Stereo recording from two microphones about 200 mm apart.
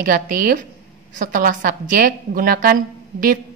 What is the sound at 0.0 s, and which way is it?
A woman's voice, 45° right (ahead or behind).